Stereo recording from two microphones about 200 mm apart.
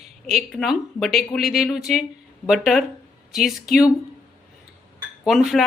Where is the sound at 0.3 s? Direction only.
Centre (ahead or behind).